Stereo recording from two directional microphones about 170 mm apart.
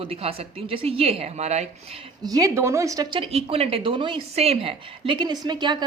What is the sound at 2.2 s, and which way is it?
Speech, 20° right (ahead or behind).